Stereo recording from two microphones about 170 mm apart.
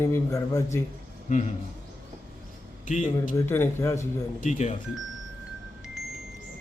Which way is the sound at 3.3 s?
15° left (ahead or behind).